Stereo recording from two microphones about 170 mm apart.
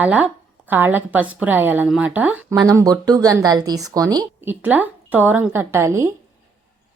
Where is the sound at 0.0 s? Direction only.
10° right (ahead or behind).